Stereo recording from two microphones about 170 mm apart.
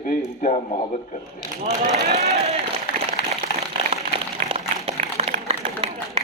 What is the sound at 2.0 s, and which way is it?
Speech, 40° right (ahead or behind).